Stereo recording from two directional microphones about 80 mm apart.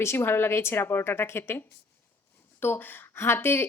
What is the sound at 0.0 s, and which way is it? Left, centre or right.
Speech, left.